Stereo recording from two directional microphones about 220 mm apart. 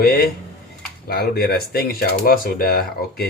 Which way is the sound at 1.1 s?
45° left (ahead or behind).